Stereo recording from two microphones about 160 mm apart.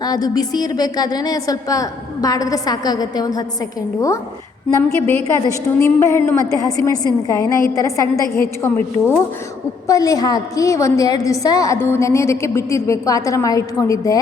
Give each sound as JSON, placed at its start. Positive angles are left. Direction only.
{"t": 0.0, "sound": "a woman's voice", "side_deg": 25}
{"t": 4.8, "sound": "a woman's voice", "side_deg": 15}
{"t": 9.8, "sound": "a woman's voice", "side_deg": 20}